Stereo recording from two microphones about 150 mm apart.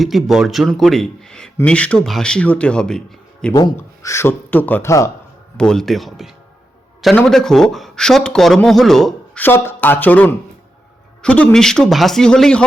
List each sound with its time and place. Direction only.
0.0 s speech: centre (ahead or behind)
3.8 s speech: 20° left (ahead or behind)
5.5 s speech: 5° left (ahead or behind)
9.4 s speech: 15° left (ahead or behind)